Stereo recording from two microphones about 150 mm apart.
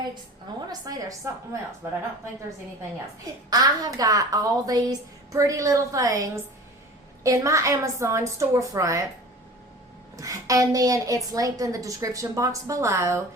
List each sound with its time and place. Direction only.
0.7 s a woman's voice: 25° right (ahead or behind)
3.5 s a woman's voice: 25° right (ahead or behind)
10.2 s a woman's voice: 20° right (ahead or behind)